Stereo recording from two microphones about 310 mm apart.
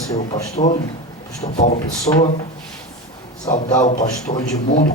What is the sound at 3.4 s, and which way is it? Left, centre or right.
Speech, left.